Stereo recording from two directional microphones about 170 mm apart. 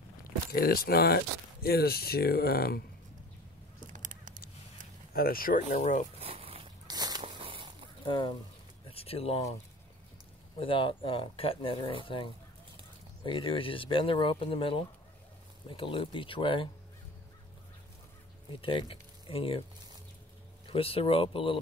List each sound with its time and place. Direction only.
0.2 s speech: 60° left (ahead or behind)
3.9 s a sound: 50° right (ahead or behind)
5.1 s speech: 60° left (ahead or behind)
6.1 s a sound: 35° right (ahead or behind)
8.0 s speech: 30° left (ahead or behind)
10.6 s speech: 30° left (ahead or behind)
18.6 s speech: 30° left (ahead or behind)
20.6 s speech: 35° left (ahead or behind)